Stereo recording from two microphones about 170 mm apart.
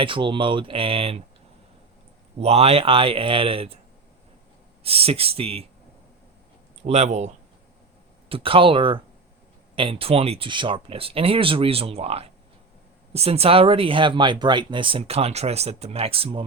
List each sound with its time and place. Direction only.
0.0 s speech: 30° right (ahead or behind)
2.4 s speech: 35° right (ahead or behind)
4.8 s speech: 35° right (ahead or behind)
6.8 s speech: 40° right (ahead or behind)
8.3 s speech: 30° right (ahead or behind)